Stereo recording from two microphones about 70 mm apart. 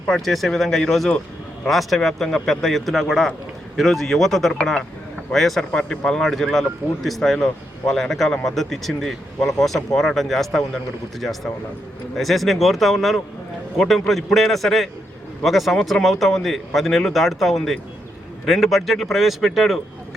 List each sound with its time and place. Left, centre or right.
0.1 s speech: centre
12.1 s speech: centre